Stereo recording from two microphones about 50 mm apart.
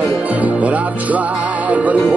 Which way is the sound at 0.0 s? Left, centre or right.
Right.